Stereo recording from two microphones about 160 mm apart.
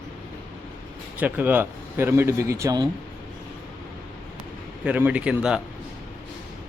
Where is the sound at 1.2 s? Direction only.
10° right (ahead or behind).